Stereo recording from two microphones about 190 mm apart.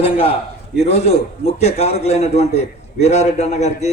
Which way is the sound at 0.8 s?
35° left (ahead or behind).